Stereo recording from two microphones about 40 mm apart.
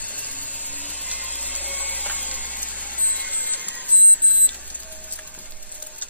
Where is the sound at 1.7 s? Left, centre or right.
Left.